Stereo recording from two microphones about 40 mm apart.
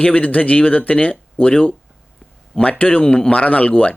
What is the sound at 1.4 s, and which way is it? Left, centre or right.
Speech, left.